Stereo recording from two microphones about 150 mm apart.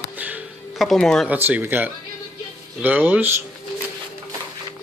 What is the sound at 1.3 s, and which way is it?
Speech, 10° right (ahead or behind).